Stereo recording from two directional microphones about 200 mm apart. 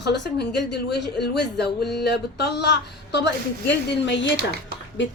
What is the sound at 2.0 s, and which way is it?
A woman's voice, 55° left (ahead or behind).